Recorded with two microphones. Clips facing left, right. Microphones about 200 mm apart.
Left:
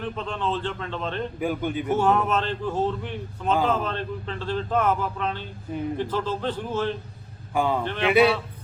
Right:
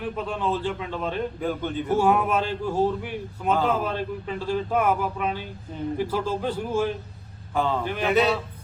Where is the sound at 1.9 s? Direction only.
10° right (ahead or behind).